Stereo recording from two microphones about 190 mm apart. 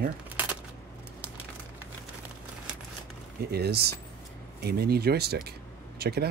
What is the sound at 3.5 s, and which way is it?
Speech, 55° right (ahead or behind).